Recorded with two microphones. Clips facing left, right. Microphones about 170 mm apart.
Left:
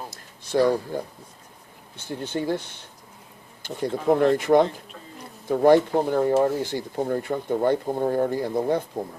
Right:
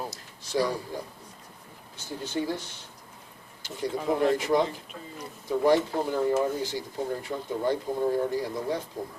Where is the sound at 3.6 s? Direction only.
55° left (ahead or behind).